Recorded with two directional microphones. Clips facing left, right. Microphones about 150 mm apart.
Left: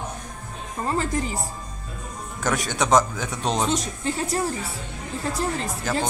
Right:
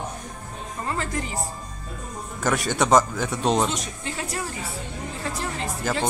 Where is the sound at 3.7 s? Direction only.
35° left (ahead or behind).